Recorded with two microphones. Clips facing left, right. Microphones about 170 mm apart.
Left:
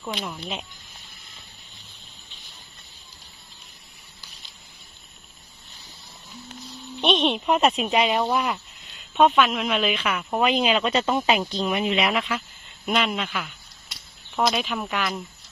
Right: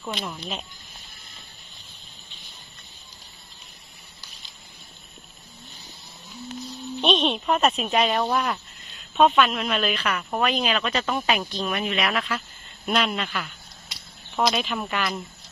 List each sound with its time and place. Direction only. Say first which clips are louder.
0.1 s speech: left 1 dB; 10° left (ahead or behind)
7.0 s speech: left 1 dB; 10° left (ahead or behind)
10.5 s speech: left 3 dB; 20° left (ahead or behind)
12.1 s speech: left 2 dB; 10° left (ahead or behind)